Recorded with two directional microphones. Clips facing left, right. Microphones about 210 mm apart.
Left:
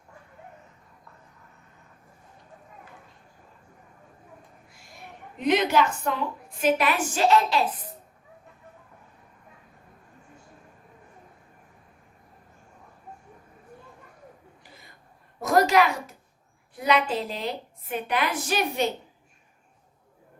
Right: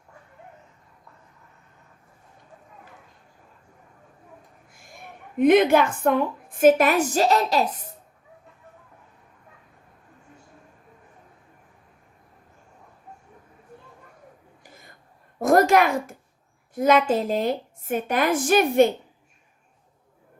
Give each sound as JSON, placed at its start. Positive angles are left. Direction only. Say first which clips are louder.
{"t": 4.7, "sound": "a woman's voice", "louder": "right 2 dB", "side_deg": -50}
{"t": 14.6, "sound": "a sound", "louder": "right 2 dB", "side_deg": -45}
{"t": 16.7, "sound": "a woman's voice", "louder": "right 5 dB", "side_deg": -45}